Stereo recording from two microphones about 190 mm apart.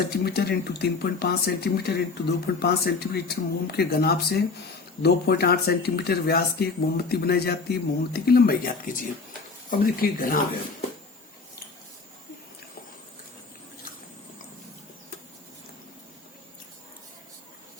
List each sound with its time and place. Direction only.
0.1 s speech: 55° left (ahead or behind)